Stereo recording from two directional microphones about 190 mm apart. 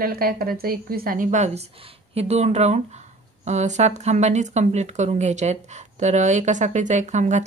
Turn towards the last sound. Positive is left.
turn(degrees=-40)  # may be behind; listen again after turning